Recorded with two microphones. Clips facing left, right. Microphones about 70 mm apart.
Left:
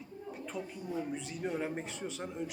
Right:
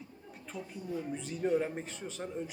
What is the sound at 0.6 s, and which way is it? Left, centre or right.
A man's voice, centre.